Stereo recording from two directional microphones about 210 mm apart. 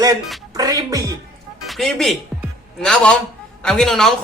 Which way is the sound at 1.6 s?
Centre (ahead or behind).